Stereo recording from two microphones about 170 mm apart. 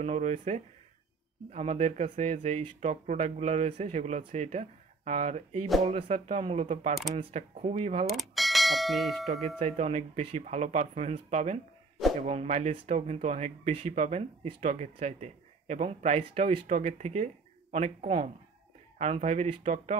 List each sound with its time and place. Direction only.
0.0 s speech: 45° right (ahead or behind)
8.1 s speech: centre (ahead or behind)
9.6 s speech: 40° right (ahead or behind)